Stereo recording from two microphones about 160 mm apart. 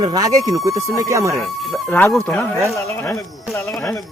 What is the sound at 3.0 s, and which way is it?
Speech, 20° left (ahead or behind).